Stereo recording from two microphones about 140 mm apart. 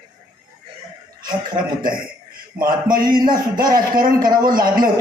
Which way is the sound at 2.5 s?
90° right.